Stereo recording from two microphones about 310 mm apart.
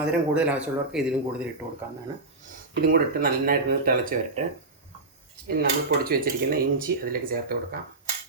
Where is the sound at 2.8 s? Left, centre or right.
Right.